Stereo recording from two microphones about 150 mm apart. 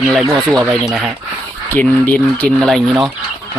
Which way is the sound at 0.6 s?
20° right (ahead or behind).